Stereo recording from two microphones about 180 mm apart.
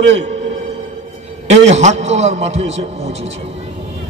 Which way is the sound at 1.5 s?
40° right (ahead or behind).